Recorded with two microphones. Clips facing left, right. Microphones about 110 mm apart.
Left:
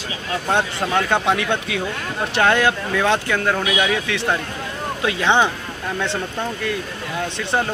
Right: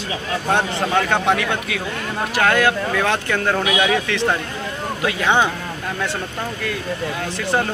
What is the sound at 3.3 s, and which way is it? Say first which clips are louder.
Speech: right 1 dB; centre (ahead or behind).